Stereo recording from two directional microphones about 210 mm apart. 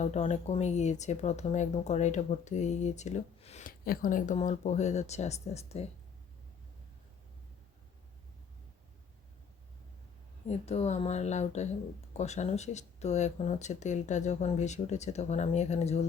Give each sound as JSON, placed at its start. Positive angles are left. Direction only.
{"t": 0.0, "sound": "speech", "side_deg": 30}
{"t": 10.4, "sound": "speech", "side_deg": 30}